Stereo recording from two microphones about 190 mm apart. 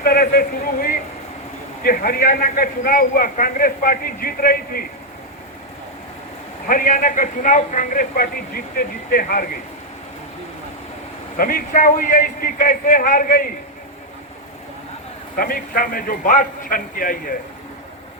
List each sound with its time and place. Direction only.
0.0 s a man's voice: 50° left (ahead or behind)
6.7 s a man's voice: 45° left (ahead or behind)
11.3 s a man's voice: 50° left (ahead or behind)
15.4 s a man's voice: 50° left (ahead or behind)